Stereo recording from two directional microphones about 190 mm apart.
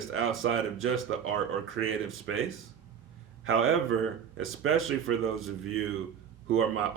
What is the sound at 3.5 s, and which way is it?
Speech, 90° right.